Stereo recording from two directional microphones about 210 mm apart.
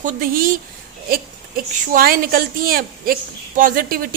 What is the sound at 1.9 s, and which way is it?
A woman's voice, 45° right (ahead or behind).